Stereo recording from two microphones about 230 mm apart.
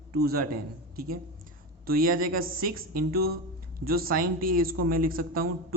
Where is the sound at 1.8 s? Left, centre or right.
Right.